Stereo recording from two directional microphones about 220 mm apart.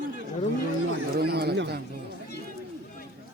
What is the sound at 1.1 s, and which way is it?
Chatter, 45° right (ahead or behind).